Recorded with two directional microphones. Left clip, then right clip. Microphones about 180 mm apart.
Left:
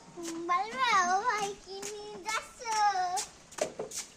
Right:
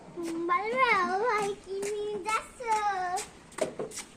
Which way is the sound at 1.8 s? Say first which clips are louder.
Right 9 dB; 15° left (ahead or behind).